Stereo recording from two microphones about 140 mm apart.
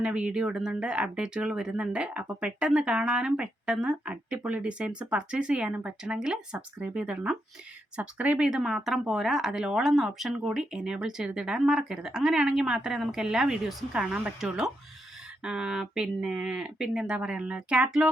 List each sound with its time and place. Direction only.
0.0 s speech: 5° right (ahead or behind)